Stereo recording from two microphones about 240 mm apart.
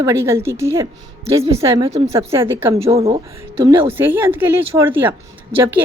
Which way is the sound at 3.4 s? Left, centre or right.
Centre.